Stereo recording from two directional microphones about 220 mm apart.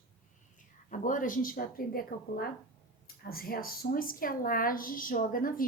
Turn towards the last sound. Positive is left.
turn(degrees=40)  # may be behind; listen again after turning